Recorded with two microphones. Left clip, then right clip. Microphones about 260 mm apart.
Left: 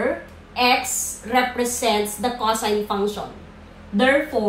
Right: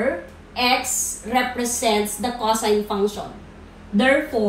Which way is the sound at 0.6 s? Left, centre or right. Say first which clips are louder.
Left 1 dB; centre.